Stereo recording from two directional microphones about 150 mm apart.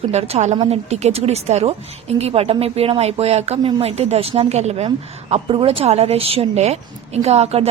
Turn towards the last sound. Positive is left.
turn(degrees=-45)  # may be behind; listen again after turning